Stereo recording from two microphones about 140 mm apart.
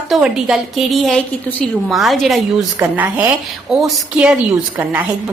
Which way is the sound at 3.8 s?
Centre (ahead or behind).